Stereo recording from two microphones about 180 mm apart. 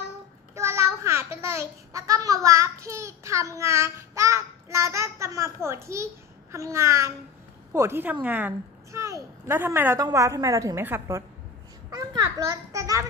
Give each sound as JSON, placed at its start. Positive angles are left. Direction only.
{"t": 0.6, "sound": "a child's voice", "side_deg": -15}